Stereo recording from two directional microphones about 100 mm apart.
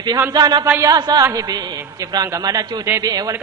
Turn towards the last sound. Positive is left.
turn(degrees=-40)  # may be behind; listen again after turning